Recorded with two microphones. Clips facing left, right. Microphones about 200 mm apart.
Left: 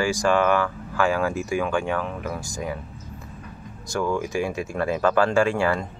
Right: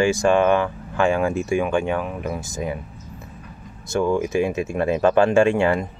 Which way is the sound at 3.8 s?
25° right (ahead or behind).